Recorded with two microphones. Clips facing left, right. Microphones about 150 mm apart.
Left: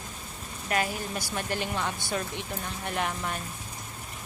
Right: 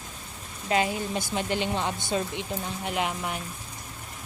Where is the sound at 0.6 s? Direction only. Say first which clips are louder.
Right 4 dB; 20° right (ahead or behind).